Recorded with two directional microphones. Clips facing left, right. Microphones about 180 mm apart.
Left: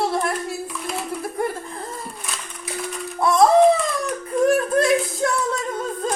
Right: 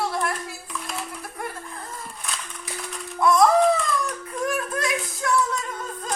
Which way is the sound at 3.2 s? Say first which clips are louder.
Left 1 dB; 30° left (ahead or behind).